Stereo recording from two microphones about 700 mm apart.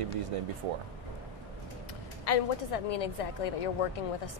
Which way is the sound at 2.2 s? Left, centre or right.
Left.